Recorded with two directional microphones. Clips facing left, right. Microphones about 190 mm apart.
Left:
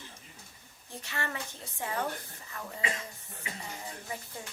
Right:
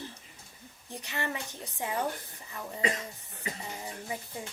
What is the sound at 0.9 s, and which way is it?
A woman's voice, 15° right (ahead or behind).